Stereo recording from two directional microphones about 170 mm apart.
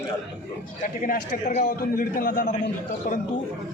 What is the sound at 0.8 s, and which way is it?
A man's voice, 50° left (ahead or behind).